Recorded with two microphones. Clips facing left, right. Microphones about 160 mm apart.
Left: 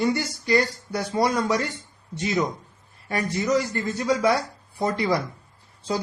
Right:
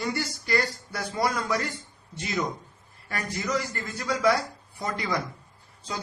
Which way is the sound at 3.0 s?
25° left (ahead or behind).